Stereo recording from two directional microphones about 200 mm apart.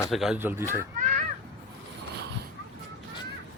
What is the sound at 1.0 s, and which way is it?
Children playing, 40° right (ahead or behind).